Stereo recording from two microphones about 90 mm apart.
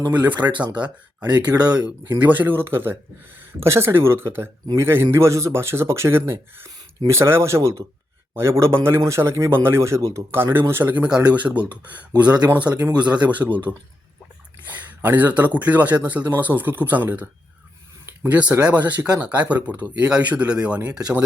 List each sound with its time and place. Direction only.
0.4 s speech: 20° right (ahead or behind)
1.3 s speech: 50° right (ahead or behind)
2.0 s a man's voice: 20° right (ahead or behind)
14.6 s speech: 20° right (ahead or behind)
18.3 s speech: 15° right (ahead or behind)